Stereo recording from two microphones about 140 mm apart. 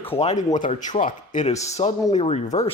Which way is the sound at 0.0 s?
45° left (ahead or behind).